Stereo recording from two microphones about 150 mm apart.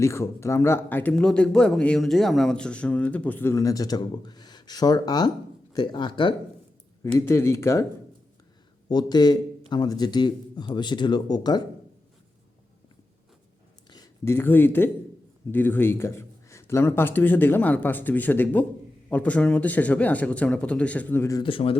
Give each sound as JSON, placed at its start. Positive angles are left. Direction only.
{"t": 0.0, "sound": "speech", "side_deg": 15}
{"t": 7.2, "sound": "a man's voice", "side_deg": 20}
{"t": 8.9, "sound": "a man's voice", "side_deg": 30}
{"t": 13.9, "sound": "speech", "side_deg": 20}
{"t": 21.4, "sound": "speech", "side_deg": 35}